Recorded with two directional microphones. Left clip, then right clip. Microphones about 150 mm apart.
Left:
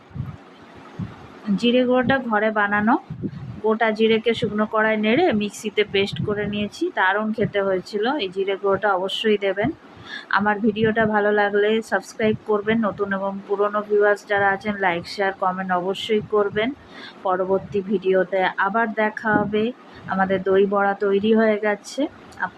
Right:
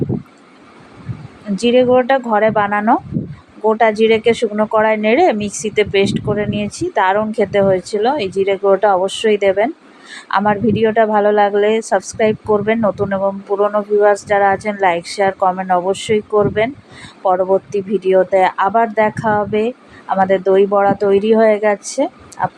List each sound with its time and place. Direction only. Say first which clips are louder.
1.5 s a woman's voice: right 7 dB; 20° right (ahead or behind)